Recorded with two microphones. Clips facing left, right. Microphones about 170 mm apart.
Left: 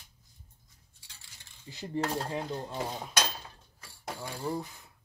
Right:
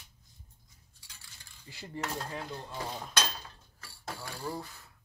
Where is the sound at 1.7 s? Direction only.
20° left (ahead or behind).